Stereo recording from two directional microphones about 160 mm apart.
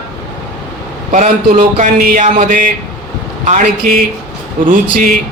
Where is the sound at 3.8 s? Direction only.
65° right (ahead or behind).